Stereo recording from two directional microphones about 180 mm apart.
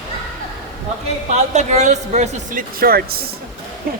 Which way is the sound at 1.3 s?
40° right (ahead or behind).